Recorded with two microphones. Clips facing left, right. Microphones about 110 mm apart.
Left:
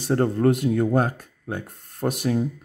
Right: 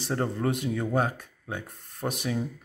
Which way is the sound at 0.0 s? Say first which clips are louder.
Left 8 dB; 50° left (ahead or behind).